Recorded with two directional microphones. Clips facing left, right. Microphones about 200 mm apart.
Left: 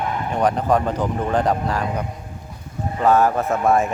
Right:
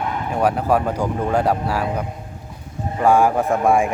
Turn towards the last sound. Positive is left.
turn(degrees=-10)  # may be behind; listen again after turning